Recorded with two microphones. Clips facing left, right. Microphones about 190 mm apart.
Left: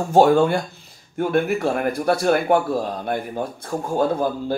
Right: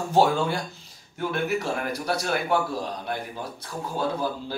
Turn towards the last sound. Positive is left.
turn(degrees=50)  # may be behind; listen again after turning